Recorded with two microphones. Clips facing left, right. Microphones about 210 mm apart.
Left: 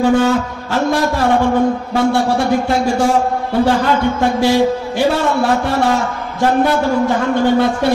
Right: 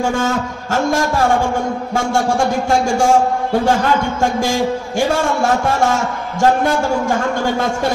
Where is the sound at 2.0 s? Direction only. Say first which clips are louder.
Left 2 dB; 45° right (ahead or behind).